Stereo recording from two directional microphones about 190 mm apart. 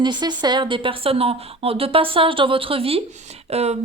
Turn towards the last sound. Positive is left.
turn(degrees=-35)  # may be behind; listen again after turning